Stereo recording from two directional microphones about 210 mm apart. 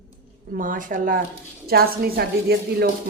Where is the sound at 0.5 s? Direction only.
40° right (ahead or behind).